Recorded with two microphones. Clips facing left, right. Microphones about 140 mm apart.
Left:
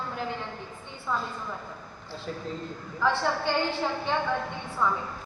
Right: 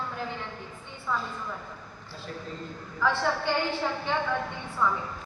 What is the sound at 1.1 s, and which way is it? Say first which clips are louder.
Speech: left 1 dB; 15° left (ahead or behind).